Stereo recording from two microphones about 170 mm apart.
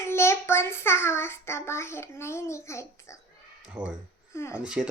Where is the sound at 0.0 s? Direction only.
15° left (ahead or behind).